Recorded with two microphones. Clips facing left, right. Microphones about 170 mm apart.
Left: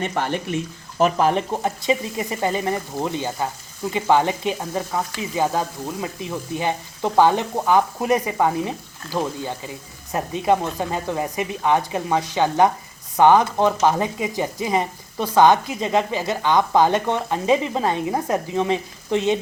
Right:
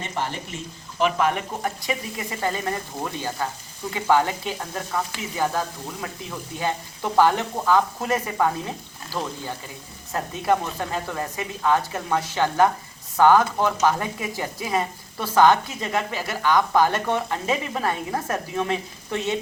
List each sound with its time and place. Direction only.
0.0 s speech: 60° left (ahead or behind)
0.9 s speech: 35° left (ahead or behind); by 19.4 s 20° left (ahead or behind)